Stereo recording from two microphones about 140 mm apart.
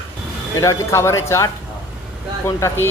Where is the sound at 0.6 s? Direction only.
20° left (ahead or behind).